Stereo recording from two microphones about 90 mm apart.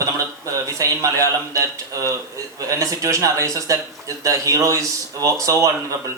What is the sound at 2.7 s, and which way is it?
Speech, 40° right (ahead or behind).